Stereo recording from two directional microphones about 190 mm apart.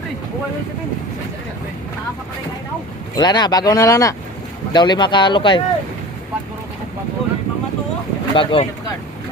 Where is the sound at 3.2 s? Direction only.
20° left (ahead or behind).